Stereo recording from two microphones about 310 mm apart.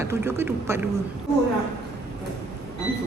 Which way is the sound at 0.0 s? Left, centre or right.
Centre.